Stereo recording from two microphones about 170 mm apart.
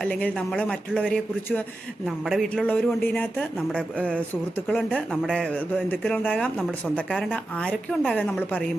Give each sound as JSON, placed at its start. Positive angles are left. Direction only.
{"t": 0.0, "sound": "a man's voice", "side_deg": 10}